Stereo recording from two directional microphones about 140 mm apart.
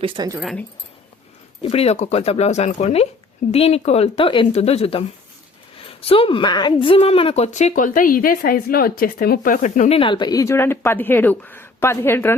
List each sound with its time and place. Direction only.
0.0 s speech: 35° right (ahead or behind)
1.6 s a woman's voice: 45° left (ahead or behind)
7.8 s speech: 75° left (ahead or behind)
9.9 s speech: 35° left (ahead or behind); by 12.4 s 15° left (ahead or behind)